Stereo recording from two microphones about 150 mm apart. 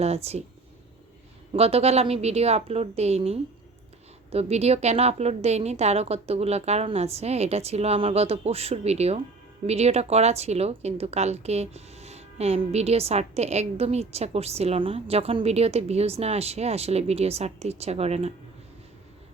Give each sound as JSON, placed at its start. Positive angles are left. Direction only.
{"t": 0.0, "sound": "speech", "side_deg": -45}
{"t": 1.5, "sound": "speech", "side_deg": -40}